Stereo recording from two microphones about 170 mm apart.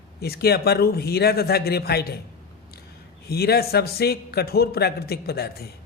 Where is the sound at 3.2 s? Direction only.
70° left (ahead or behind).